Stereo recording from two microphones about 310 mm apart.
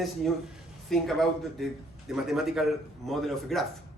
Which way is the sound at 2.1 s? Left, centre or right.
Centre.